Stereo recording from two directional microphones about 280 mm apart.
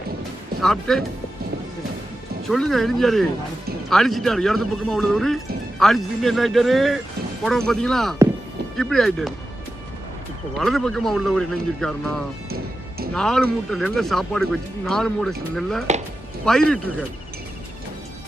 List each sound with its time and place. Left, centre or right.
0.6 s speech: centre
2.4 s speech: centre
10.6 s speech: centre
12.5 s music: right
13.1 s speech: centre